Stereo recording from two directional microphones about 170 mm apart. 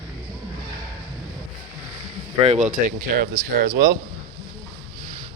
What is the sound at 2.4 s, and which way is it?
Speech, 45° right (ahead or behind).